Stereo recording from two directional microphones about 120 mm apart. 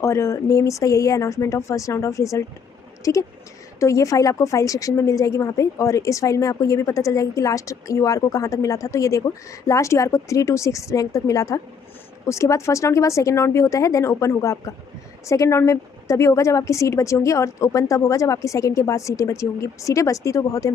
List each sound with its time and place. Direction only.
0.0 s a woman's voice: 25° left (ahead or behind)